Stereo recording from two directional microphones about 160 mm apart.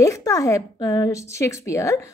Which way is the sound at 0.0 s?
20° left (ahead or behind).